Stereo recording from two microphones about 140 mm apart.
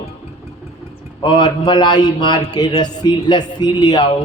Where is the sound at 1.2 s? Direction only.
30° left (ahead or behind).